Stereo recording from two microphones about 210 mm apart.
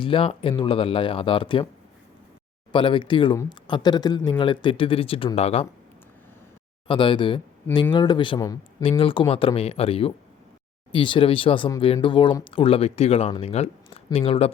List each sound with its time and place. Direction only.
0.0 s speech: 25° left (ahead or behind)
2.7 s speech: 25° left (ahead or behind)
6.8 s speech: 25° left (ahead or behind)